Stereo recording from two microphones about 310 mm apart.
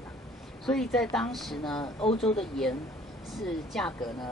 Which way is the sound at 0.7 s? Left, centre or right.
Centre.